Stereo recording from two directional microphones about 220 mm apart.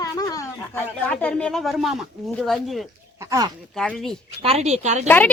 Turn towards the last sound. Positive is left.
turn(degrees=-30)  # may be behind; listen again after turning